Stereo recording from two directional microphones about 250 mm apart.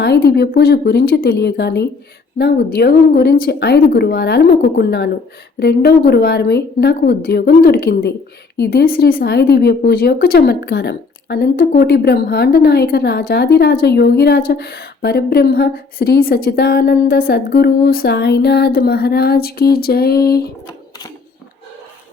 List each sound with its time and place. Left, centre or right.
0.0 s speech: left